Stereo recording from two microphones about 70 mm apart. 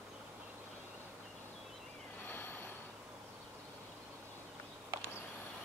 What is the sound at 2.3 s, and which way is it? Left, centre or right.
Vehicle, left.